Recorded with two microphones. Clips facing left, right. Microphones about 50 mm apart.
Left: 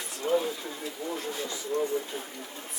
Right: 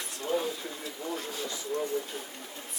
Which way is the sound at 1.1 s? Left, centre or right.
Centre.